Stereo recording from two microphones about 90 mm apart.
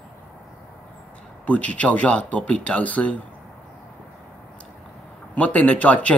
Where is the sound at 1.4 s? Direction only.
15° left (ahead or behind).